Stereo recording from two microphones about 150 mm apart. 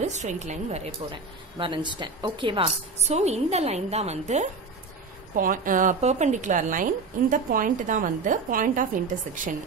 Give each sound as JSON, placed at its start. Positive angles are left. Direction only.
{"t": 0.0, "sound": "a woman's voice", "side_deg": -50}
{"t": 5.3, "sound": "a woman's voice", "side_deg": -65}